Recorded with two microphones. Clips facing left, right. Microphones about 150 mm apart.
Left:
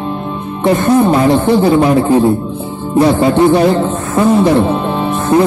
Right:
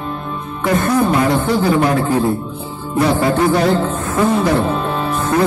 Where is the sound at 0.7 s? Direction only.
25° left (ahead or behind).